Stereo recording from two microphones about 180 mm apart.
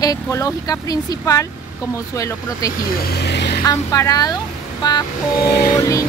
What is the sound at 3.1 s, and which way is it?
Vehicle, 65° left (ahead or behind).